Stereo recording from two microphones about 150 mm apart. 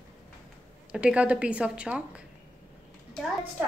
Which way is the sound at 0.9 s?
5° right (ahead or behind).